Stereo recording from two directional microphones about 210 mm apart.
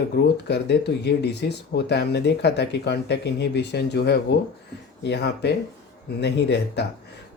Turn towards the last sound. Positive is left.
turn(degrees=50)  # may be behind; listen again after turning